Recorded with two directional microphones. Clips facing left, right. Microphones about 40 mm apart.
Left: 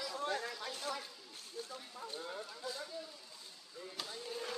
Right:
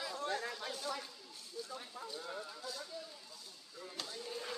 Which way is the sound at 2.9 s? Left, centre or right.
Centre.